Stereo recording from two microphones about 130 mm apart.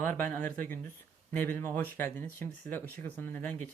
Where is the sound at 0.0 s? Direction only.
15° left (ahead or behind).